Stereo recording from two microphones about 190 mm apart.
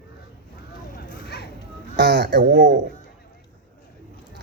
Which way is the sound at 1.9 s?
60° right (ahead or behind).